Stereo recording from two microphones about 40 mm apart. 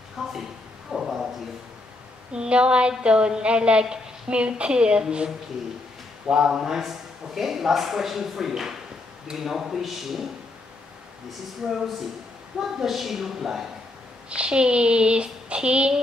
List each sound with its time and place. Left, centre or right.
0.2 s a sound: centre
2.3 s speech: right
6.3 s a man's voice: centre
11.6 s a man's voice: centre
14.3 s speech: right